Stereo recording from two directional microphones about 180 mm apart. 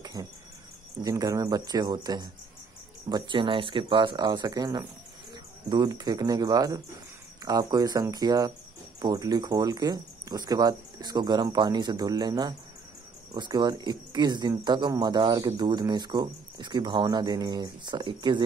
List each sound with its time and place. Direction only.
0.0 s cricket: 20° right (ahead or behind)
1.0 s speech: 20° right (ahead or behind)